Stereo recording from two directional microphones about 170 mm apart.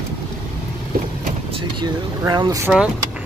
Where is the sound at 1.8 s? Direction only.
25° right (ahead or behind).